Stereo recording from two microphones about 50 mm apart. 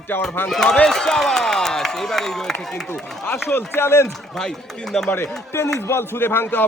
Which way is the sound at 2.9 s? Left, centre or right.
Left.